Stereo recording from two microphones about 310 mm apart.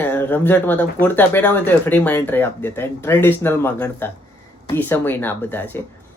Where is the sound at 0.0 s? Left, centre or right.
Centre.